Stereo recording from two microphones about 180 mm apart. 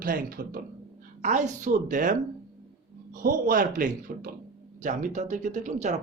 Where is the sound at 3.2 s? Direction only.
50° right (ahead or behind).